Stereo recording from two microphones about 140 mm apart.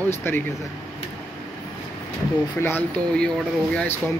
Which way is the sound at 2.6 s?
15° left (ahead or behind).